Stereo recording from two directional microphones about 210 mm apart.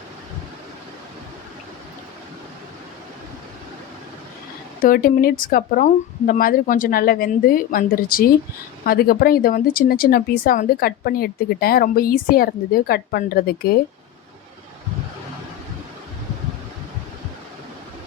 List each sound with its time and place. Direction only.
4.8 s speech: 45° left (ahead or behind)